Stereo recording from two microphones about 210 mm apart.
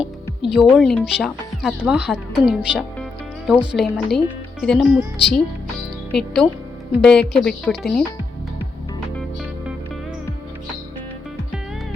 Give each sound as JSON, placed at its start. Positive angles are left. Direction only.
{"t": 0.5, "sound": "speech", "side_deg": 0}
{"t": 3.0, "sound": "music", "side_deg": -5}
{"t": 4.6, "sound": "speech", "side_deg": 5}